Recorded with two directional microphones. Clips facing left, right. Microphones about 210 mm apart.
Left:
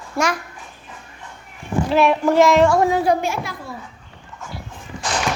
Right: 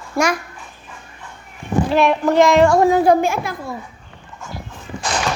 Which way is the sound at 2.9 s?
50° right (ahead or behind).